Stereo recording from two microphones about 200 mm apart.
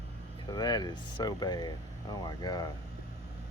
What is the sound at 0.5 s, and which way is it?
Speech, 20° left (ahead or behind).